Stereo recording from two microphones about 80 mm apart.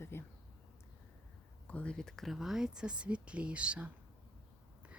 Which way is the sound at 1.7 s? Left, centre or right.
Centre.